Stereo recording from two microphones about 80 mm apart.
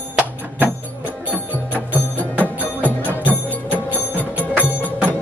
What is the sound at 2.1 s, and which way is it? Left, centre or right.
Music, centre.